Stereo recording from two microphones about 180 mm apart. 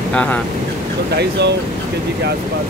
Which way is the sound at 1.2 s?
70° right (ahead or behind).